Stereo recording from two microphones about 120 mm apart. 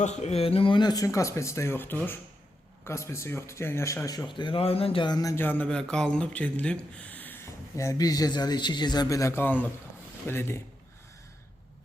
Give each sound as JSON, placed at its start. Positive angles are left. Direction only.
{"t": 0.0, "sound": "speech", "side_deg": 70}
{"t": 4.3, "sound": "speech", "side_deg": 40}
{"t": 5.0, "sound": "speech", "side_deg": 30}
{"t": 5.4, "sound": "speech", "side_deg": 15}